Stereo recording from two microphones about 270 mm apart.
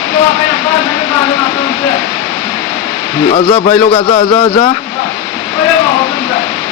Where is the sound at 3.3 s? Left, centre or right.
Left.